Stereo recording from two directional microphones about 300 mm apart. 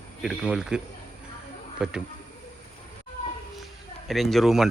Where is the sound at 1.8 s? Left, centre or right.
Centre.